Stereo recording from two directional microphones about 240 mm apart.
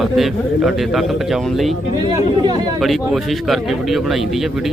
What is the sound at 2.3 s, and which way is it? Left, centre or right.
Speech, centre.